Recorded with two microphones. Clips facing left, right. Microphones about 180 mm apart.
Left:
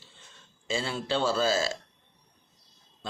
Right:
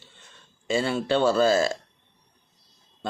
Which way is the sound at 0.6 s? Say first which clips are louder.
Right 7 dB; 60° right (ahead or behind).